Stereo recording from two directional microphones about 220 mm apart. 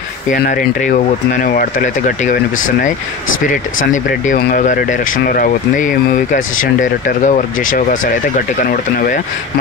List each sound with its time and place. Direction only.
0.3 s speech: 35° left (ahead or behind)
3.4 s speech: 35° left (ahead or behind)